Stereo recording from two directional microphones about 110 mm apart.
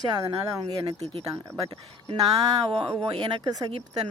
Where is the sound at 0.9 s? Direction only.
70° right (ahead or behind).